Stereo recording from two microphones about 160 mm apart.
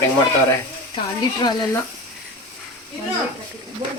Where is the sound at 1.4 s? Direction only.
25° left (ahead or behind).